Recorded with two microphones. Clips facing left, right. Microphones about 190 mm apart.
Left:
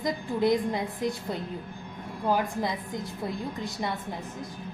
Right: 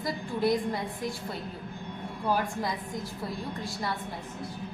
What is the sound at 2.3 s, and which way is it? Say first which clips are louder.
Speech: left 2 dB; 20° left (ahead or behind).